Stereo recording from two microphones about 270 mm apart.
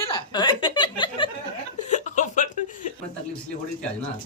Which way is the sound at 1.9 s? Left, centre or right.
Left.